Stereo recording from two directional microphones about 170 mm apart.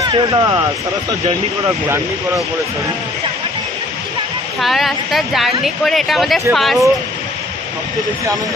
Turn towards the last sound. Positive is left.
turn(degrees=0)  # may be behind; listen again after turning